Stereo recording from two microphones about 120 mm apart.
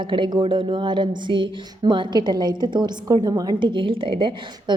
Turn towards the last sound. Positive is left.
turn(degrees=-45)  # may be behind; listen again after turning